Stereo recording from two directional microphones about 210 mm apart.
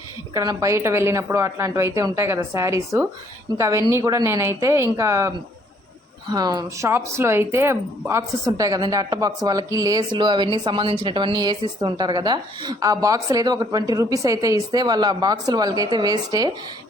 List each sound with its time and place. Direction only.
0.3 s speech: 15° right (ahead or behind)